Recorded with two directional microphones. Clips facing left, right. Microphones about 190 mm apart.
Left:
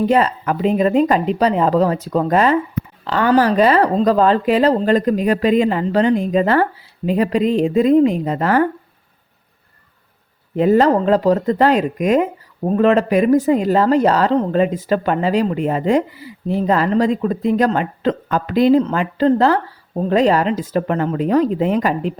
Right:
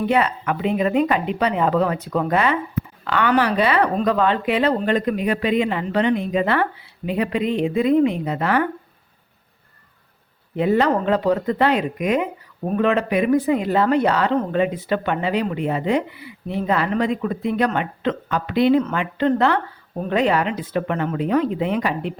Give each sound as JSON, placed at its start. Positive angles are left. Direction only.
{"t": 0.0, "sound": "speech", "side_deg": 40}
{"t": 10.5, "sound": "speech", "side_deg": 40}